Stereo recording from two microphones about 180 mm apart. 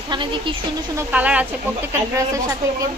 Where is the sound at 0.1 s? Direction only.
25° right (ahead or behind).